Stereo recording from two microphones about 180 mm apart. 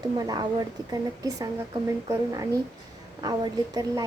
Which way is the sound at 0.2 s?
20° right (ahead or behind).